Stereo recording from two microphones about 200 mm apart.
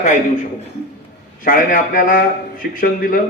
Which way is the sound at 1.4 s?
45° left (ahead or behind).